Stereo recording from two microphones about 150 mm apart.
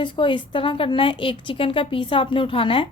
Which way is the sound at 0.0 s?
35° left (ahead or behind).